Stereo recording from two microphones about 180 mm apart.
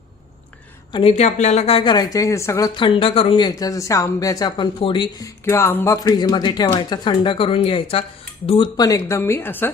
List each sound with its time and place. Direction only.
0.9 s speech: 35° left (ahead or behind); by 2.6 s 15° left (ahead or behind)
2.7 s speech: 30° left (ahead or behind)
5.5 s speech: 15° left (ahead or behind)